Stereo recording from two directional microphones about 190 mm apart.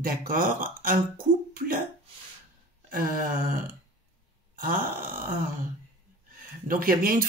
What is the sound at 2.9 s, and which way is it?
Speech, 45° right (ahead or behind).